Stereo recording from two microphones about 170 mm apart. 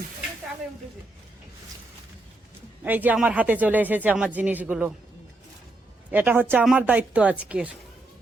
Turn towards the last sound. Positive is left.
turn(degrees=-5)  # may be behind; listen again after turning